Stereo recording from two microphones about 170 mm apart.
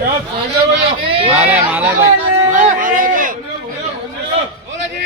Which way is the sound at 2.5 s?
50° right (ahead or behind).